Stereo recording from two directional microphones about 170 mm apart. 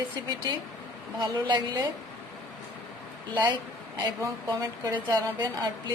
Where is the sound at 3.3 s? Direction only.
25° right (ahead or behind).